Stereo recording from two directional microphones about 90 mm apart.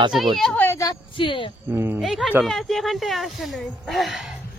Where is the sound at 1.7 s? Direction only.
25° right (ahead or behind).